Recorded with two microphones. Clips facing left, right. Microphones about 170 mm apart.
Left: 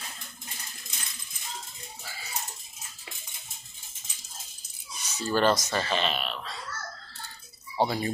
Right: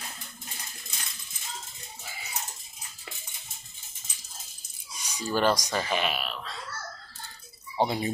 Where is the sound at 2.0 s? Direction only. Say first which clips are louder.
Right 1 dB; 20° right (ahead or behind).